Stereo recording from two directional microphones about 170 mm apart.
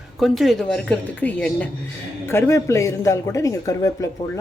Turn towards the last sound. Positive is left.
turn(degrees=20)  # may be behind; listen again after turning